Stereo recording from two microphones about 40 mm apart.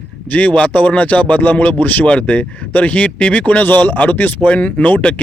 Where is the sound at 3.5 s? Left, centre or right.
Left.